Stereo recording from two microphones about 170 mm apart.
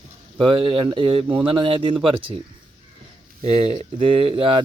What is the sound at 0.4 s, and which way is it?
Speech, 30° right (ahead or behind).